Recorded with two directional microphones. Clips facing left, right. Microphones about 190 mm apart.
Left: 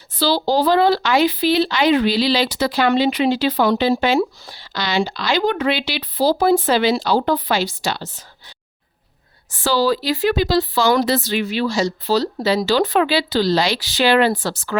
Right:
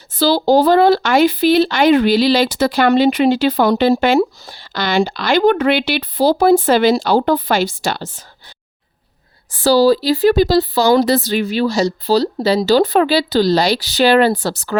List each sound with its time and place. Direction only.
0.1 s speech: 45° right (ahead or behind)
9.5 s speech: 40° right (ahead or behind)